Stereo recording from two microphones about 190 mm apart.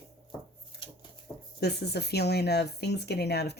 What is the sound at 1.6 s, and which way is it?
Speech, 60° left (ahead or behind).